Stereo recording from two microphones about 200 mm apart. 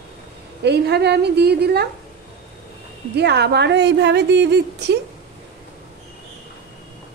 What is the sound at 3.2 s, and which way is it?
A woman's voice, 55° right (ahead or behind).